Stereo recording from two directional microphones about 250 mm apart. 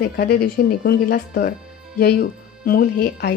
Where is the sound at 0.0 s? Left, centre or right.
Left.